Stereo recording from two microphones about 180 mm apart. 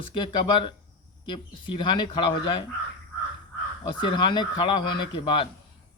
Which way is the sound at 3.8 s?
25° left (ahead or behind).